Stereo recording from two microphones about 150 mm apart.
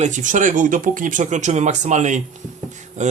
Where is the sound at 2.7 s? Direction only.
50° right (ahead or behind).